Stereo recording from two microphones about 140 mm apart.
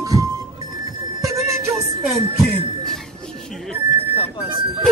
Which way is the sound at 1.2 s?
25° right (ahead or behind).